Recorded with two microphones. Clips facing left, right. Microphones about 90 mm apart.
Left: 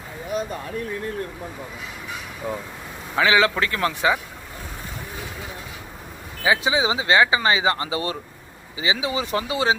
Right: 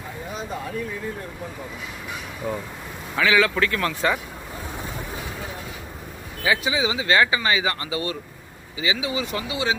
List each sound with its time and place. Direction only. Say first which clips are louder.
2.4 s speech: right 1 dB; 5° left (ahead or behind)
3.2 s speech: left 1 dB; 25° left (ahead or behind)
6.4 s speech: left 2 dB; 25° left (ahead or behind)